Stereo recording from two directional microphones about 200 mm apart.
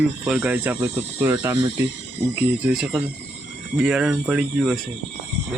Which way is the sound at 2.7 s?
5° right (ahead or behind).